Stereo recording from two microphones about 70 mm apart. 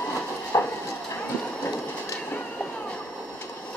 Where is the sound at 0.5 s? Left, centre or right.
Left.